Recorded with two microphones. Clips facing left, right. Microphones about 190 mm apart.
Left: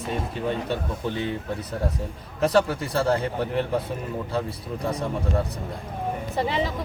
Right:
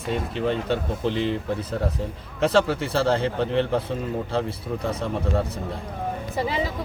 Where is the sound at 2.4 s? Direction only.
25° right (ahead or behind).